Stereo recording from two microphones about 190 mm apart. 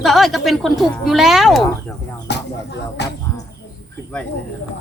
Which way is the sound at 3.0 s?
65° left (ahead or behind).